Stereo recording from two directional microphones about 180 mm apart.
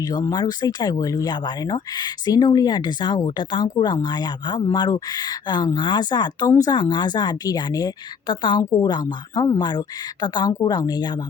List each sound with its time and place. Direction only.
0.0 s speech: 20° left (ahead or behind)